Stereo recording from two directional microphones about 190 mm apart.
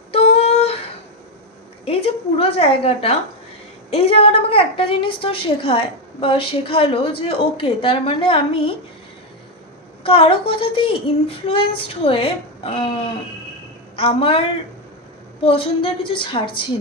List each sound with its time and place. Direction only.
0.1 s a sound: 35° left (ahead or behind)
1.9 s a woman's voice: 30° left (ahead or behind)
10.0 s a woman's voice: 30° left (ahead or behind)